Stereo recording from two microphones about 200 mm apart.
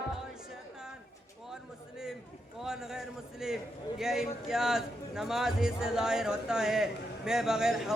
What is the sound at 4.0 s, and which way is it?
A man's voice, centre (ahead or behind).